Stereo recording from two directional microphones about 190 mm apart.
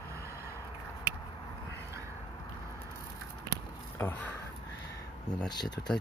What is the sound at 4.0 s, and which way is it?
Speech, 10° left (ahead or behind).